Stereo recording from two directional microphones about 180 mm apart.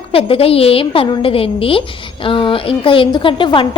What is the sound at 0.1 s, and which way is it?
A woman's voice, 30° left (ahead or behind).